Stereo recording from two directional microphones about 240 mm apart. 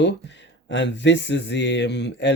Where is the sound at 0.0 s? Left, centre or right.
Left.